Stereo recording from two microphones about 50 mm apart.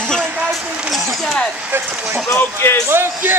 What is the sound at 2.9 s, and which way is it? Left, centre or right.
Speech, right.